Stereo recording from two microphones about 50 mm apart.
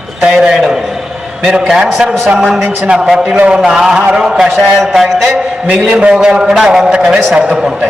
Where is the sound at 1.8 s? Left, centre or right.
Centre.